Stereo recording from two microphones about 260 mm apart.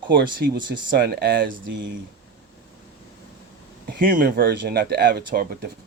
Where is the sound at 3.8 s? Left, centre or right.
Right.